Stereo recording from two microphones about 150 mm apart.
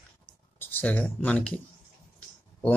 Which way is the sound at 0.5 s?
10° left (ahead or behind).